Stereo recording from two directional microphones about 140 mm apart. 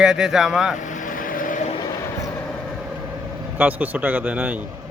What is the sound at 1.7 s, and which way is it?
Vehicle, 30° left (ahead or behind).